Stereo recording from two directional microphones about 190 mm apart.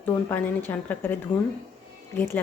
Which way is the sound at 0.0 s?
10° left (ahead or behind).